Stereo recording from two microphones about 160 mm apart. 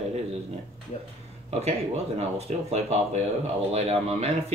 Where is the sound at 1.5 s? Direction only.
45° right (ahead or behind).